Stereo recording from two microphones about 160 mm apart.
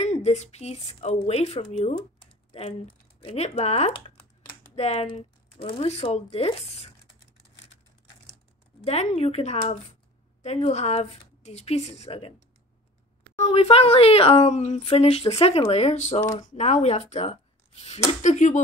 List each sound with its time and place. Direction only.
0.0 s speech: 45° left (ahead or behind)
3.3 s speech: 40° left (ahead or behind)
8.8 s speech: 40° left (ahead or behind)
13.4 s speech: 40° left (ahead or behind)